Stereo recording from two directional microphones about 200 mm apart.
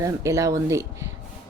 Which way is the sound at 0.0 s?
15° right (ahead or behind).